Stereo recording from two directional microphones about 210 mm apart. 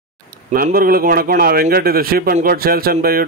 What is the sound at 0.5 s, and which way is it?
A man's voice, 45° right (ahead or behind).